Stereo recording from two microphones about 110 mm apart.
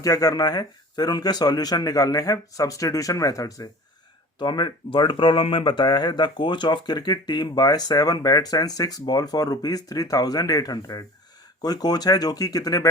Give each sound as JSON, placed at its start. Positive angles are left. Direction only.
{"t": 0.0, "sound": "speech", "side_deg": 35}
{"t": 4.4, "sound": "speech", "side_deg": 45}